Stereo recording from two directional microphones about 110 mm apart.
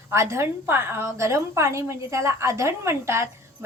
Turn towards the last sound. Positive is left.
turn(degrees=-25)  # may be behind; listen again after turning